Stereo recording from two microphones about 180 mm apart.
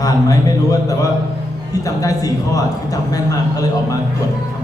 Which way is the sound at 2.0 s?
20° left (ahead or behind).